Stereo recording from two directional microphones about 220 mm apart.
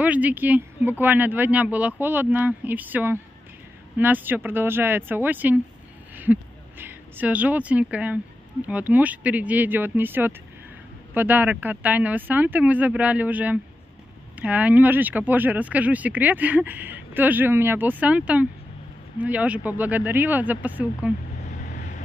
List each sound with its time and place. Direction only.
0.0 s speech: 5° right (ahead or behind)
21.5 s vehicle: 35° left (ahead or behind)